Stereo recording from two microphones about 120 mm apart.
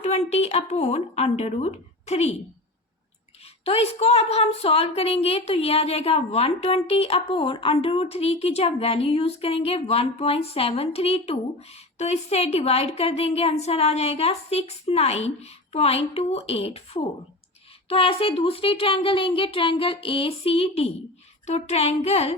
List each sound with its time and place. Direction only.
0.0 s a woman's voice: 65° left (ahead or behind)
3.6 s a woman's voice: 55° left (ahead or behind)
21.4 s a woman's voice: 65° left (ahead or behind)